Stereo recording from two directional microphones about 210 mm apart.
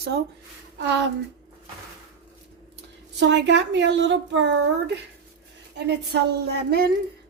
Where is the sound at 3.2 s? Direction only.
55° right (ahead or behind).